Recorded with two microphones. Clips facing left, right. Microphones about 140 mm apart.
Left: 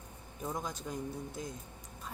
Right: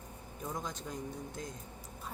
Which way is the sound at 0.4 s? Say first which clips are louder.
Left 2 dB; 10° left (ahead or behind).